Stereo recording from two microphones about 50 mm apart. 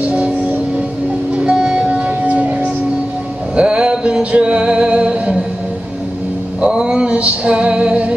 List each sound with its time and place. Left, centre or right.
0.0 s music: right
6.6 s music: centre